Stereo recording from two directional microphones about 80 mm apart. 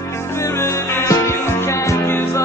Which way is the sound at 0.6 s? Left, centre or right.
Left.